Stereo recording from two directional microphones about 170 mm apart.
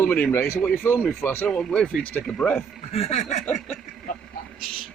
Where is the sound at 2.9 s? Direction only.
40° left (ahead or behind).